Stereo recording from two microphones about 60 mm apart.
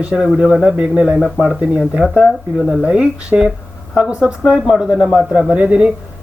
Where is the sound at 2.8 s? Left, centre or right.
Centre.